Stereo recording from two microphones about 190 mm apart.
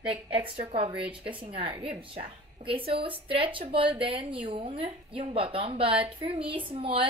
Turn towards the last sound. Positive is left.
turn(degrees=-30)  # may be behind; listen again after turning